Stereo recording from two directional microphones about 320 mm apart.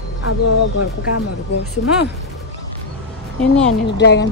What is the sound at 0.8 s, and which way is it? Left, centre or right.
Speech, left.